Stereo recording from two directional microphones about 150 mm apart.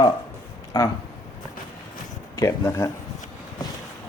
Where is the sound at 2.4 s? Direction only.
20° left (ahead or behind).